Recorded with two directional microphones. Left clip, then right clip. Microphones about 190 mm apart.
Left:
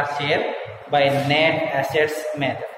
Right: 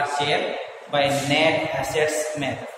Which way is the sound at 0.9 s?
40° left (ahead or behind).